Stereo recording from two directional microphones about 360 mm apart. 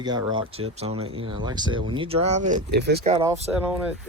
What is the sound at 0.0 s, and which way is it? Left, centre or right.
Speech, centre.